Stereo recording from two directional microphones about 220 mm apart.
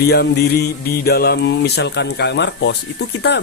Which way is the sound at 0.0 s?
45° left (ahead or behind).